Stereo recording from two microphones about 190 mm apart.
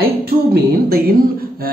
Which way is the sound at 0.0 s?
50° right (ahead or behind).